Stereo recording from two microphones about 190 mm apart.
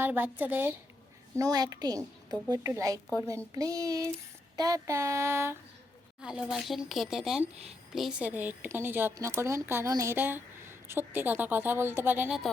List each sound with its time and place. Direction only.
0.0 s a woman's voice: 10° right (ahead or behind)
6.2 s speech: 5° right (ahead or behind)